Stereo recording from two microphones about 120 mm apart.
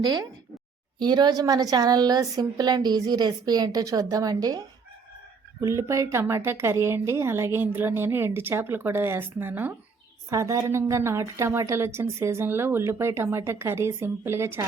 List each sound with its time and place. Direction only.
0.0 s a woman's voice: 35° right (ahead or behind)